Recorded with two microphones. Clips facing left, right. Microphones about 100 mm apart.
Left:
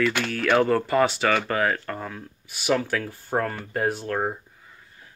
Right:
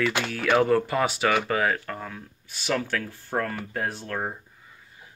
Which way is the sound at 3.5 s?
5° left (ahead or behind).